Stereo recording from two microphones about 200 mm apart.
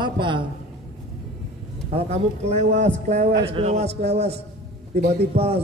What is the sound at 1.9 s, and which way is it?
A man's voice, 35° right (ahead or behind).